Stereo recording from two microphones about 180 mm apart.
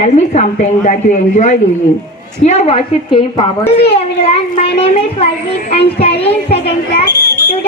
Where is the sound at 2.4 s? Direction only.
35° left (ahead or behind).